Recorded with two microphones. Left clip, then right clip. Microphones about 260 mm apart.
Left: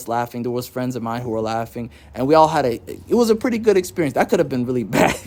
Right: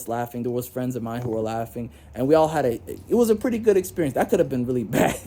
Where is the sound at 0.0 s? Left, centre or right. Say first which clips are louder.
Left 5 dB; centre.